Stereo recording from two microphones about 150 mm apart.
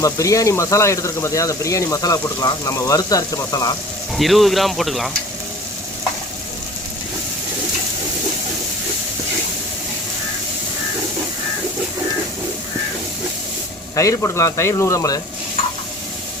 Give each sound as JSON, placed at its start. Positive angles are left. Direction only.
{"t": 0.0, "sound": "speech", "side_deg": 20}
{"t": 4.1, "sound": "speech", "side_deg": 0}
{"t": 13.9, "sound": "speech", "side_deg": 20}